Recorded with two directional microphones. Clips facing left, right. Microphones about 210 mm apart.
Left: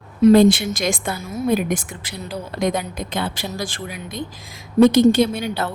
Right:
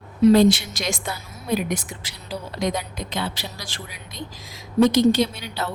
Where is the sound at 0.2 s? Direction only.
50° left (ahead or behind).